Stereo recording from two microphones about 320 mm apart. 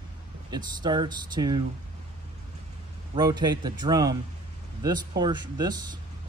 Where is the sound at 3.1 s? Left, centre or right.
Centre.